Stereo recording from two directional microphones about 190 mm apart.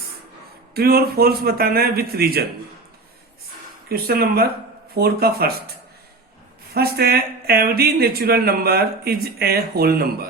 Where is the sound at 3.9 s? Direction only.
55° right (ahead or behind).